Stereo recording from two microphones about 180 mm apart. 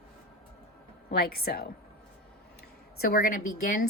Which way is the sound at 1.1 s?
55° left (ahead or behind).